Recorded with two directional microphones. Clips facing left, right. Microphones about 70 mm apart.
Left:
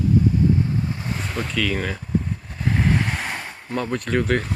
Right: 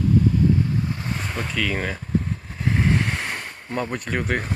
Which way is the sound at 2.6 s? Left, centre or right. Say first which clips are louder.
Even; centre.